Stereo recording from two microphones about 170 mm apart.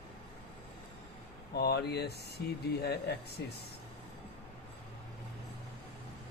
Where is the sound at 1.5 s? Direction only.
70° left (ahead or behind).